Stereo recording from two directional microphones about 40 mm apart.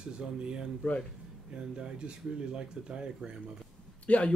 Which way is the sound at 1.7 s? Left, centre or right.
Right.